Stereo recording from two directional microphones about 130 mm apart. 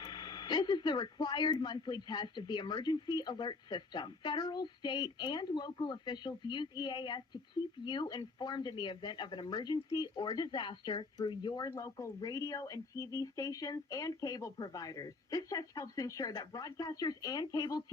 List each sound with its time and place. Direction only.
0.0 s speech: 35° left (ahead or behind)